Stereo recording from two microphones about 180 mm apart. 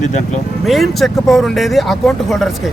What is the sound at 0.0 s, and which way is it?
Speech, 40° left (ahead or behind).